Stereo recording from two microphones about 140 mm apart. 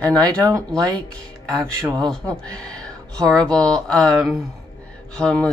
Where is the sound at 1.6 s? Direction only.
5° left (ahead or behind).